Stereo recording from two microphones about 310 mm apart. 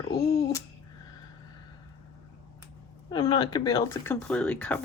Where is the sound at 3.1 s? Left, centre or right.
Centre.